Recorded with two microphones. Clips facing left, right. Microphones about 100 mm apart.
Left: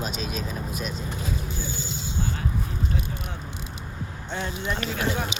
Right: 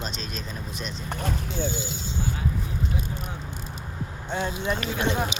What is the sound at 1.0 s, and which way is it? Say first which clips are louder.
Speech: right 1 dB; 65° right (ahead or behind).